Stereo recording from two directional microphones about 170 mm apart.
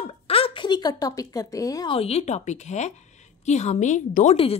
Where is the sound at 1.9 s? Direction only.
35° left (ahead or behind).